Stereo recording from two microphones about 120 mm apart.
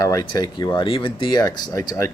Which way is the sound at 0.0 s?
30° left (ahead or behind).